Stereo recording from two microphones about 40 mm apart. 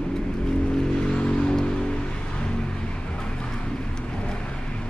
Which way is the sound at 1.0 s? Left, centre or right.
Left.